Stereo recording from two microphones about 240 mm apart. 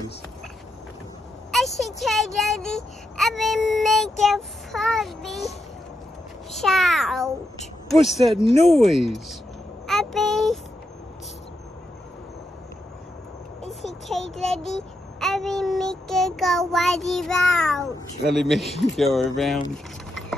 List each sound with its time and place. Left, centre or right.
1.5 s a sound: centre
2.0 s child singing: centre
6.5 s child singing: centre
14.0 s child singing: centre
14.6 s speech: left
15.1 s child singing: centre
19.7 s vehicle: centre